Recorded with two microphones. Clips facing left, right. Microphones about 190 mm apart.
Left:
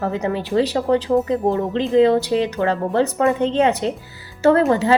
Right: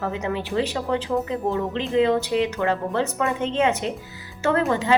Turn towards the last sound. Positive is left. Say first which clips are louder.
# left 7 dB
turn(degrees=40)  # may be behind; listen again after turning